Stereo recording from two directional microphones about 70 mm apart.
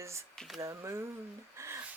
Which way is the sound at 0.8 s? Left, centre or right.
Right.